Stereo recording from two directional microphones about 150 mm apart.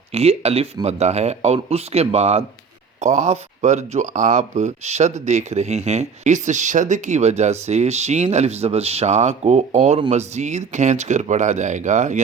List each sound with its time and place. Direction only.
0.1 s speech: 45° right (ahead or behind)